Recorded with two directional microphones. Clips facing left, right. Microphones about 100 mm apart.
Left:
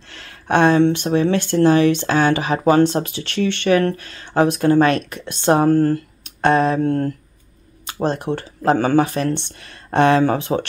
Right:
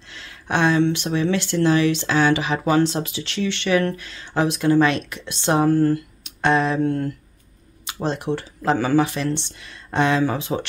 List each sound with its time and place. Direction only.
0.1 s speech: 50° left (ahead or behind)
7.8 s a sound: 50° left (ahead or behind)
8.4 s speech: 50° left (ahead or behind)